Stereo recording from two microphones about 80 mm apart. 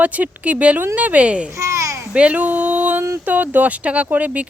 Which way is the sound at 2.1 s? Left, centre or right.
Centre.